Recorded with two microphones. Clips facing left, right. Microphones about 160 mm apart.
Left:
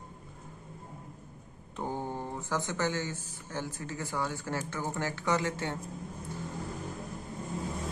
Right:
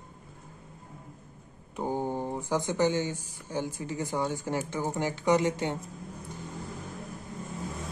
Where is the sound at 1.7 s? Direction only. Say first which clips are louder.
Right 5 dB; 15° right (ahead or behind).